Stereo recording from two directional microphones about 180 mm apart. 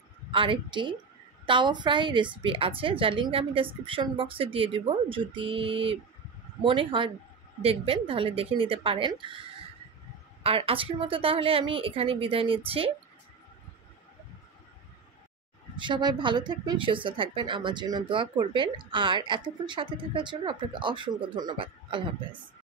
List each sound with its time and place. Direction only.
0.3 s a woman's voice: 30° right (ahead or behind)
15.7 s speech: 25° right (ahead or behind)